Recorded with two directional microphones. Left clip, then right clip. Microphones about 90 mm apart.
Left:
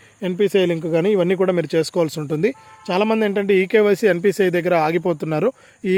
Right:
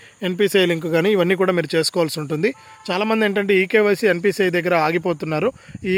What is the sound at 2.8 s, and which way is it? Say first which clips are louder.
Speech: left 1 dB; centre (ahead or behind).